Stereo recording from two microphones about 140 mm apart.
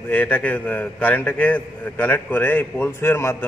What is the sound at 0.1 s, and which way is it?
A man's voice, 10° left (ahead or behind).